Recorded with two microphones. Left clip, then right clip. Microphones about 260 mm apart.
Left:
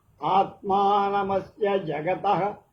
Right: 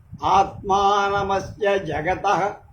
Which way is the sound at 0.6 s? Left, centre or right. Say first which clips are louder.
Right 3 dB; right.